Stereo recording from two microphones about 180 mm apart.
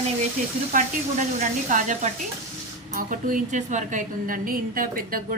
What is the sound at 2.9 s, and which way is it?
A woman's voice, 50° right (ahead or behind).